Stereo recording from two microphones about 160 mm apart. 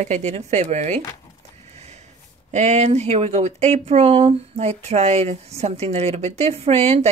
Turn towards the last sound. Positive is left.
turn(degrees=-40)  # may be behind; listen again after turning